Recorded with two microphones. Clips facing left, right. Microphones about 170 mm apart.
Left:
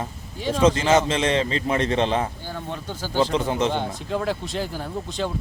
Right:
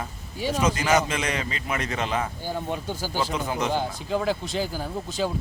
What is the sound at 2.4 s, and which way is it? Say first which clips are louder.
Speech: right 3 dB; 10° right (ahead or behind).